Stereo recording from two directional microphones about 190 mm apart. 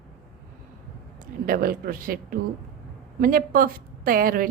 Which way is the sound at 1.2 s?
50° right (ahead or behind).